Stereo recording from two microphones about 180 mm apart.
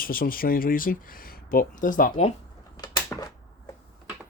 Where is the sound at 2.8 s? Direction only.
20° left (ahead or behind).